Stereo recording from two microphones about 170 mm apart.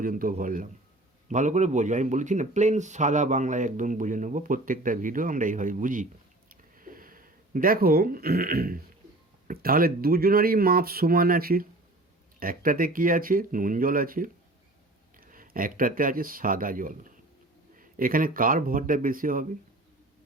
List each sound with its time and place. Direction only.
0.0 s a man's voice: 55° right (ahead or behind)
6.5 s a sound: 55° right (ahead or behind)
9.5 s speech: 60° right (ahead or behind)